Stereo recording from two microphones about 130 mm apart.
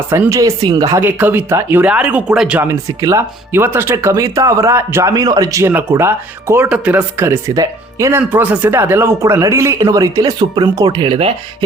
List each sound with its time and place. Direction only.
0.1 s speech: 20° right (ahead or behind)
1.0 s speech: 15° right (ahead or behind)
2.6 s speech: 25° right (ahead or behind); by 11.3 s 40° right (ahead or behind)